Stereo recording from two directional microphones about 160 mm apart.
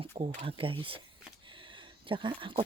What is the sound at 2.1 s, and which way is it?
Speech, 30° right (ahead or behind).